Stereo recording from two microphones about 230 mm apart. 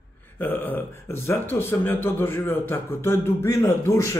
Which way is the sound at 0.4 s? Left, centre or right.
Centre.